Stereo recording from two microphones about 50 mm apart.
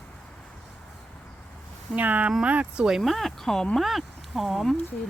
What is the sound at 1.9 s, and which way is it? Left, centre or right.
Speech, right.